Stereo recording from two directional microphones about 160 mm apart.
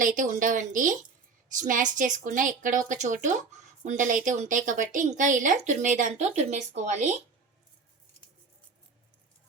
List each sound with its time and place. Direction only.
0.0 s a woman's voice: 55° right (ahead or behind)